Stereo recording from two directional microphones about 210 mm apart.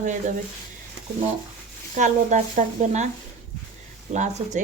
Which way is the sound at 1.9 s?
35° right (ahead or behind).